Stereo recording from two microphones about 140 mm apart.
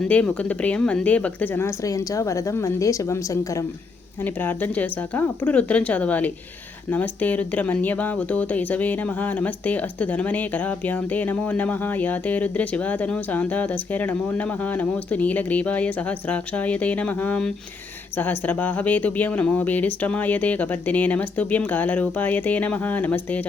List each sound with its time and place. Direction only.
0.0 s a woman's voice: 10° left (ahead or behind)